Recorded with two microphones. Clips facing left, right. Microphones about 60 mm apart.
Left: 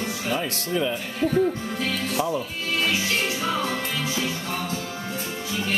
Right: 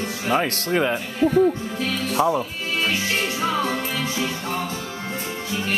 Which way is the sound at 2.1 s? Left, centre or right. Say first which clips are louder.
Right 7 dB; right.